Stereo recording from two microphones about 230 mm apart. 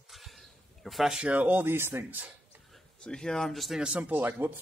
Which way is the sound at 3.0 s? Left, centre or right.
Centre.